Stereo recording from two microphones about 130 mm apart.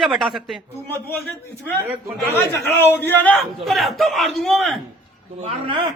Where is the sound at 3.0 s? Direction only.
15° left (ahead or behind).